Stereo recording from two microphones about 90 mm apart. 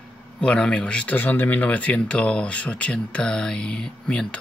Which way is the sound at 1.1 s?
20° left (ahead or behind).